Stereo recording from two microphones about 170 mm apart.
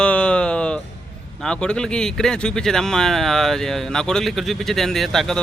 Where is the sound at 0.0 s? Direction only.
5° left (ahead or behind).